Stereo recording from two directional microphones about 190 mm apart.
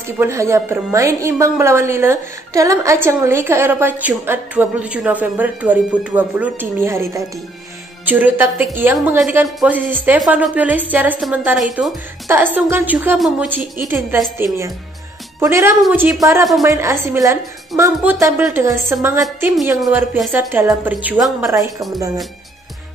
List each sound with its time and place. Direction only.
0.0 s a woman's voice: 15° right (ahead or behind)
15.4 s a woman's voice: 15° right (ahead or behind)
20.3 s a woman's voice: 10° right (ahead or behind)
21.5 s a woman's voice: 20° right (ahead or behind)